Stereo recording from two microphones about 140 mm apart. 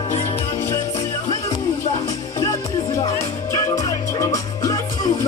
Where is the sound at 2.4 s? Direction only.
25° left (ahead or behind).